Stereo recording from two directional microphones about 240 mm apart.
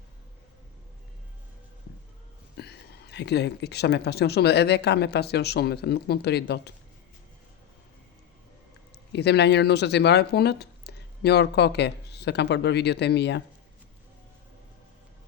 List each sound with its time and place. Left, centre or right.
2.6 s speech: left
9.1 s speech: left